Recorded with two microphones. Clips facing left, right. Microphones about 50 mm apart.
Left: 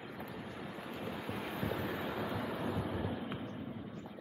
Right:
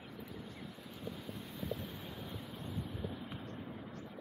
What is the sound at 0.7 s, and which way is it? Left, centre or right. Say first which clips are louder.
Waves: left 5 dB; left.